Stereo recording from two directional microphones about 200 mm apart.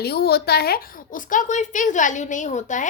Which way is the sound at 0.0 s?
55° left (ahead or behind).